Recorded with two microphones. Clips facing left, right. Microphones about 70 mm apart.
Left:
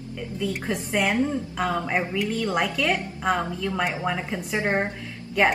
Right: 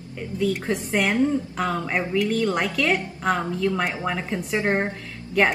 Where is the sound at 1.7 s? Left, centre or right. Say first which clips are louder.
Left 2 dB; centre.